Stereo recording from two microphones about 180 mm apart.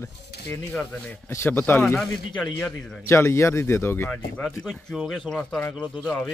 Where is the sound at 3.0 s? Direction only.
15° left (ahead or behind).